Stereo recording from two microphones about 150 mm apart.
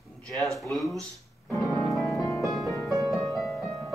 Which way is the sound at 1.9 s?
20° left (ahead or behind).